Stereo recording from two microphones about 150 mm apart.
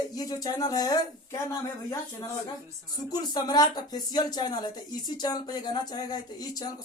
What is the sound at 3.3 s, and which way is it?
Speech, 30° left (ahead or behind).